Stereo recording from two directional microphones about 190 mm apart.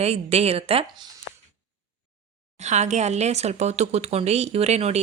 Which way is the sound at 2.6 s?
40° right (ahead or behind).